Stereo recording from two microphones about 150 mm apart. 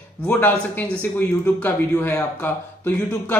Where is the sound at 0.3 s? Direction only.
10° left (ahead or behind).